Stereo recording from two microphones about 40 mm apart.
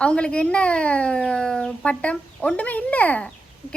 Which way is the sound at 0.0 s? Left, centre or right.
Left.